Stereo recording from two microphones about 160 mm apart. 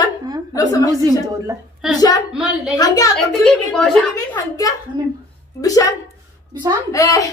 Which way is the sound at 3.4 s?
Centre (ahead or behind).